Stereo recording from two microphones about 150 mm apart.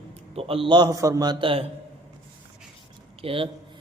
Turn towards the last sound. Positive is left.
turn(degrees=-40)  # may be behind; listen again after turning